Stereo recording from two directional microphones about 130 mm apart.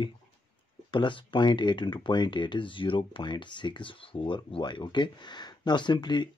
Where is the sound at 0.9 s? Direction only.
40° left (ahead or behind).